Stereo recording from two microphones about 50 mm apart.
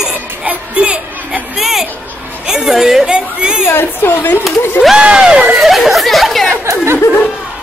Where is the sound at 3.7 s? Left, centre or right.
Left.